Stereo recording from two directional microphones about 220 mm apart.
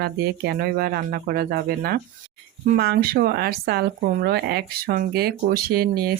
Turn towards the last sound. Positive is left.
turn(degrees=-45)  # may be behind; listen again after turning